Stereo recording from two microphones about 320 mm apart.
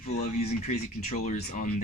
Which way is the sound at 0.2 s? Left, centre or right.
Left.